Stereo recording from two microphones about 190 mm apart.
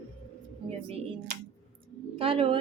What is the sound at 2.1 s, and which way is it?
Speech, 30° right (ahead or behind).